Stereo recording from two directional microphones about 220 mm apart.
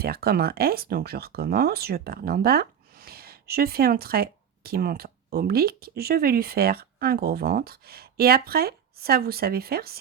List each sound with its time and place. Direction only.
0.0 s speech: 45° right (ahead or behind)